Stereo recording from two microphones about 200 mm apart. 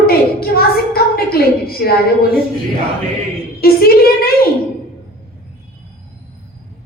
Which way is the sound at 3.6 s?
50° left (ahead or behind).